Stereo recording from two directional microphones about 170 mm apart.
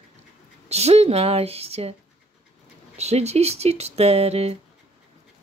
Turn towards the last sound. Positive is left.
turn(degrees=-35)  # may be behind; listen again after turning